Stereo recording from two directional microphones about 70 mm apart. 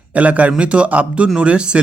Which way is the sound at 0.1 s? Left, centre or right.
Right.